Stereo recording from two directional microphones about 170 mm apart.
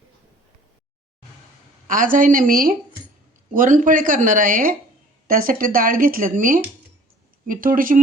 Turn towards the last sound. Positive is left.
turn(degrees=-55)  # may be behind; listen again after turning